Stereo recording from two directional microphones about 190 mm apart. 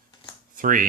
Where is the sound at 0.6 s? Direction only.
45° right (ahead or behind).